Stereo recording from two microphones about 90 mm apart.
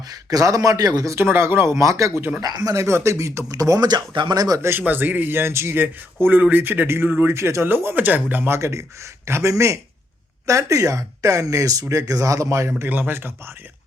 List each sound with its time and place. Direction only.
0.1 s speech: 40° right (ahead or behind)
2.7 s speech: 30° right (ahead or behind)
4.8 s speech: 20° right (ahead or behind)
12.9 s speech: 25° right (ahead or behind)